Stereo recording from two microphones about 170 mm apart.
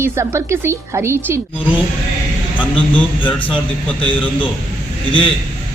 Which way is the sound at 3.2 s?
10° left (ahead or behind).